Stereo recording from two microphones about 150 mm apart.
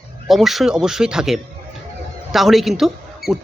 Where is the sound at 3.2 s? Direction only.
90° left.